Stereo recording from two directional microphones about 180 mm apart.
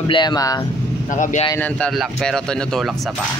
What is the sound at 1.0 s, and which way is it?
Speech, 45° left (ahead or behind).